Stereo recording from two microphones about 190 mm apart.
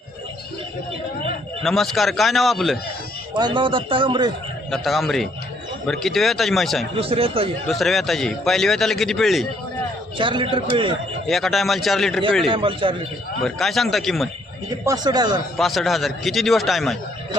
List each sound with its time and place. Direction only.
1.6 s a man's voice: centre (ahead or behind)
3.3 s speech: 25° right (ahead or behind)
4.7 s a man's voice: centre (ahead or behind)
6.9 s speech: 30° right (ahead or behind)
7.7 s a man's voice: centre (ahead or behind)
10.2 s speech: 25° right (ahead or behind)
11.3 s a man's voice: centre (ahead or behind)
12.5 s speech: 25° right (ahead or behind)
13.4 s a man's voice: centre (ahead or behind)
14.8 s speech: 20° right (ahead or behind)
15.5 s a man's voice: centre (ahead or behind)